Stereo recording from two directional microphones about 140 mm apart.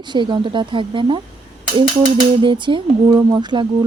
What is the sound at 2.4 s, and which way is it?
Speech, 35° right (ahead or behind).